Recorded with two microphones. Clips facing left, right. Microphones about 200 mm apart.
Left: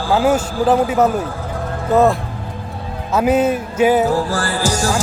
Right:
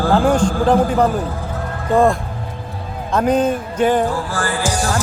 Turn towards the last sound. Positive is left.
turn(degrees=40)  # may be behind; listen again after turning